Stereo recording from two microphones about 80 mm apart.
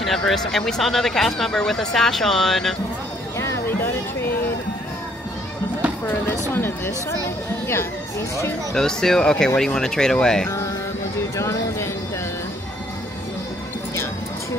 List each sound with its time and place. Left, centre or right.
0.0 s speech: centre
3.3 s a sound: left
6.5 s speech: left
8.7 s speech: centre
11.3 s speech: left